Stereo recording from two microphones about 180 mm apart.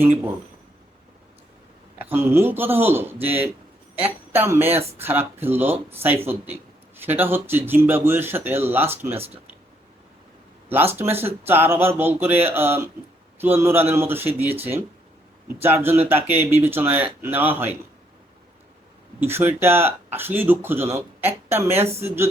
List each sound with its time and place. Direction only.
2.0 s speech: 10° right (ahead or behind)
9.1 s speech: 35° right (ahead or behind)
10.7 s speech: 10° right (ahead or behind)
19.2 s speech: 10° right (ahead or behind)